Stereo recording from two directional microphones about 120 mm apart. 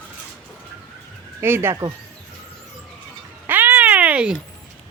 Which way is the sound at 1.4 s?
20° right (ahead or behind).